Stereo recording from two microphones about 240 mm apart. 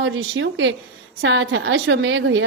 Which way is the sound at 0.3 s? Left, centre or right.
Right.